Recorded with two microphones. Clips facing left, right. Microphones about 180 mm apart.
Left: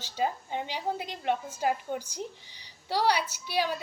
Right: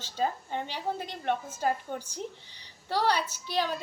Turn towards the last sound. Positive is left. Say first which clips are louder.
# left 1 dB
turn(degrees=10)  # may be behind; listen again after turning